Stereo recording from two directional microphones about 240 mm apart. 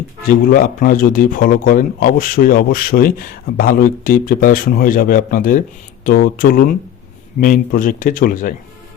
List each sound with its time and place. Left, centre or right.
0.3 s speech: left